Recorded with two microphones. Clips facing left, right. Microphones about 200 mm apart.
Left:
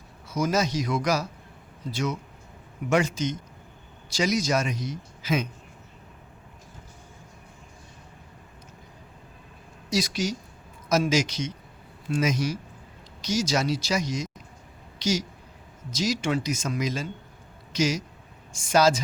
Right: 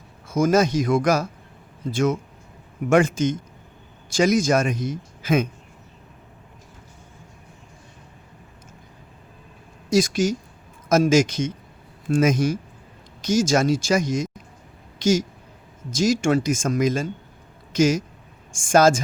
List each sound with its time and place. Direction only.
0.3 s a man's voice: 50° right (ahead or behind)
9.9 s a man's voice: 50° right (ahead or behind)